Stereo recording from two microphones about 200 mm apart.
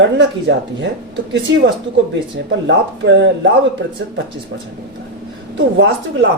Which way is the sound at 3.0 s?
65° right (ahead or behind).